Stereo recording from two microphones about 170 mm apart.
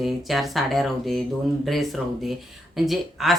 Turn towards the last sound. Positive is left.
turn(degrees=0)  # may be behind; listen again after turning